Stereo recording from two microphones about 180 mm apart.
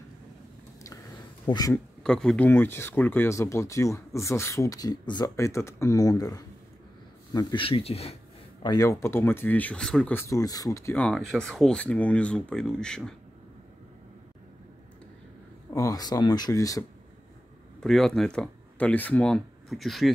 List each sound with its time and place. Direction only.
1.5 s speech: 20° left (ahead or behind)
2.0 s speech: 5° left (ahead or behind); by 8.2 s 35° left (ahead or behind)
8.6 s speech: 20° left (ahead or behind)
15.7 s speech: 20° left (ahead or behind)
17.7 s speech: centre (ahead or behind)